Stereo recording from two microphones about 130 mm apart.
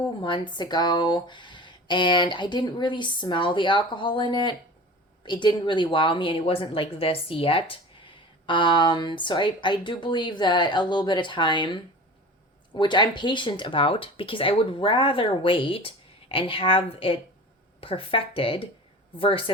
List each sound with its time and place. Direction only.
0.2 s speech: 35° left (ahead or behind)